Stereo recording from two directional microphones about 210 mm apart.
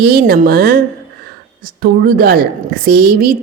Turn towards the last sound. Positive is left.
turn(degrees=-45)  # may be behind; listen again after turning